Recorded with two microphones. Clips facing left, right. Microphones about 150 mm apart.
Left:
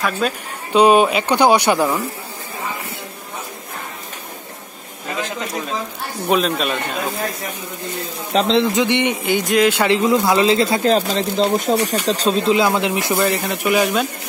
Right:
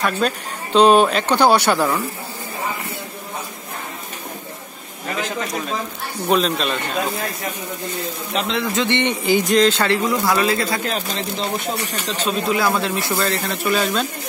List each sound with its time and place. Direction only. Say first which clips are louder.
0.2 s a man's voice: even; 5° left (ahead or behind)
6.2 s speech: left 1 dB; 5° left (ahead or behind)
8.3 s speech: left 8 dB; 35° left (ahead or behind)
8.8 s a man's voice: left 2 dB; 10° left (ahead or behind)
9.2 s speech: right 3 dB; centre (ahead or behind); by 12.4 s 40° left (ahead or behind)
12.4 s a man's voice: left 2 dB; 20° left (ahead or behind)